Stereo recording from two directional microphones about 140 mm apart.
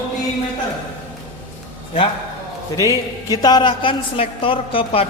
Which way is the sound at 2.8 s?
25° left (ahead or behind).